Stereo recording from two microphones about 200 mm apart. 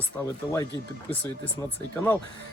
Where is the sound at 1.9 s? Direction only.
10° left (ahead or behind).